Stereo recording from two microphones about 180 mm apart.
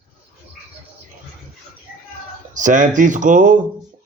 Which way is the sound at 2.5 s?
45° right (ahead or behind).